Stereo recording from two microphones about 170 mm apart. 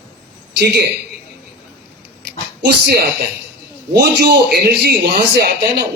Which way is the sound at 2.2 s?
75° right (ahead or behind).